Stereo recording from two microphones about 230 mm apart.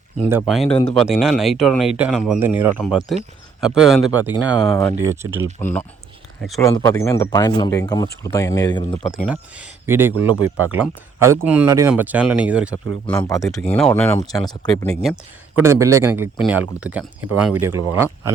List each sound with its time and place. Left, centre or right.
0.3 s speech: centre
5.2 s speech: right
5.5 s speech: centre
9.2 s speech: centre
13.1 s speech: centre
14.8 s speech: centre
15.6 s speech: centre